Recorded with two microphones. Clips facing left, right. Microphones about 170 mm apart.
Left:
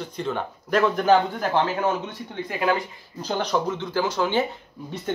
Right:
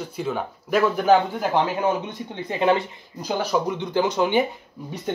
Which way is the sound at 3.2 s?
10° right (ahead or behind).